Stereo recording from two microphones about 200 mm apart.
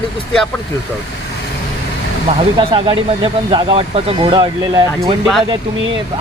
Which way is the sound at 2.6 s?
25° right (ahead or behind).